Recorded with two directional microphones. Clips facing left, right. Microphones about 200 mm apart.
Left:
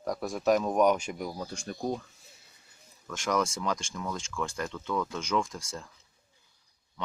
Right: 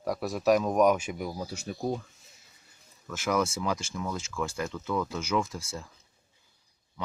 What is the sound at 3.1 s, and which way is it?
Speech, 5° right (ahead or behind).